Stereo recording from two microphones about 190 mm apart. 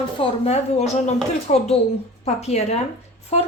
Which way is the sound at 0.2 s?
35° left (ahead or behind).